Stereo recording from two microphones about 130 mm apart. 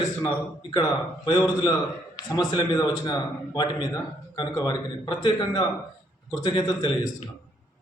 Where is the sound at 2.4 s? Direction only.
35° left (ahead or behind).